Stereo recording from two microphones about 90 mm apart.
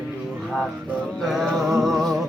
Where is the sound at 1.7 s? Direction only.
Centre (ahead or behind).